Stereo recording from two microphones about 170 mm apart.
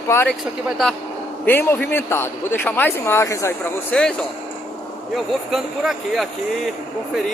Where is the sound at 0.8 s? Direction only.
Centre (ahead or behind).